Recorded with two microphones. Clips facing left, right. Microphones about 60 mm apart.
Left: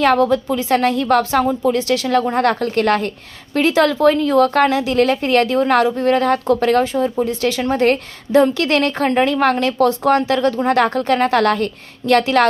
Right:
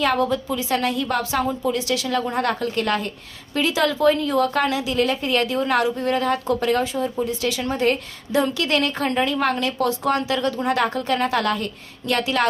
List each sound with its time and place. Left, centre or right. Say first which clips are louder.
0.0 s a woman's voice: left 6 dB; left